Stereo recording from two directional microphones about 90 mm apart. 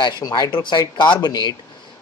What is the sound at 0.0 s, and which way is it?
Speech, 50° left (ahead or behind).